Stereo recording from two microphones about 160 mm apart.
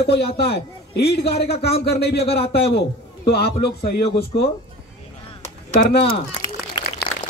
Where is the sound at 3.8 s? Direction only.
75° left (ahead or behind).